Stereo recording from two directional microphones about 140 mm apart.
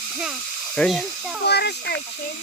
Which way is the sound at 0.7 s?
5° left (ahead or behind).